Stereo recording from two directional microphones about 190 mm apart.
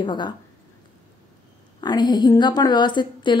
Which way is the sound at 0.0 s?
25° left (ahead or behind).